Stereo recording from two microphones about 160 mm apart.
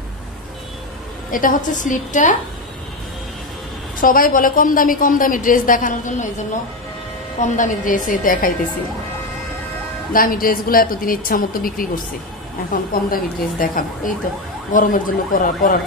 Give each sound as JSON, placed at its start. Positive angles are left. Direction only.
{"t": 1.3, "sound": "a woman's voice", "side_deg": 55}
{"t": 4.0, "sound": "a woman's voice", "side_deg": 60}
{"t": 10.1, "sound": "a woman's voice", "side_deg": 60}
{"t": 13.1, "sound": "a woman's voice", "side_deg": 60}